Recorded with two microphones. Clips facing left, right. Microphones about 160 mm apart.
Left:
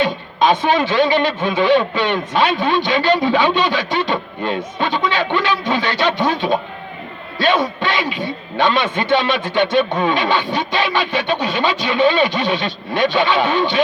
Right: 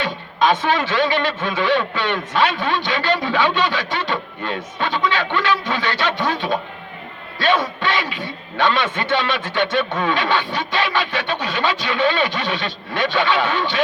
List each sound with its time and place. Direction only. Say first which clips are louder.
0.0 s a man's voice: left 3 dB; 15° left (ahead or behind)